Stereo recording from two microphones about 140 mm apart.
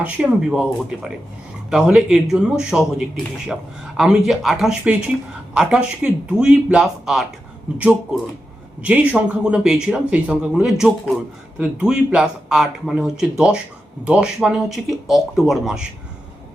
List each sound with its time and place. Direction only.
0.0 s speech: 5° right (ahead or behind)